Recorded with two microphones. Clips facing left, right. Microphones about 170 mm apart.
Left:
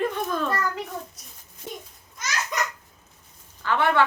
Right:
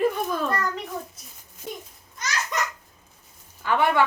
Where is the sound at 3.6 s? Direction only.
15° right (ahead or behind).